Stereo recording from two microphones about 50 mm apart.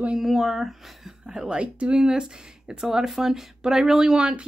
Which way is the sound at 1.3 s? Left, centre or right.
Centre.